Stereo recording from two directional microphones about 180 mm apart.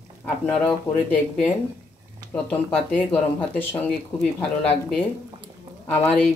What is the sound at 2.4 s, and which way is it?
Speech, 10° left (ahead or behind).